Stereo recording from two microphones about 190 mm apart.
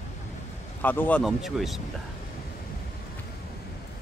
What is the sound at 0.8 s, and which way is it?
Speech, 10° left (ahead or behind).